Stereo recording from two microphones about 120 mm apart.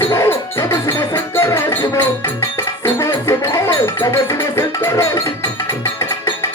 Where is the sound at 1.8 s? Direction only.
35° left (ahead or behind).